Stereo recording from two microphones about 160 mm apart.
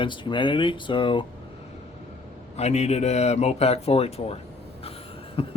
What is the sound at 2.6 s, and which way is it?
Speech, 40° left (ahead or behind).